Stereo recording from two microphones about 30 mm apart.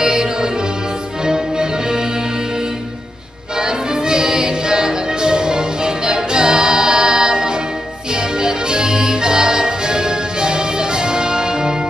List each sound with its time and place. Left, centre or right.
0.0 s music: right
3.5 s music: right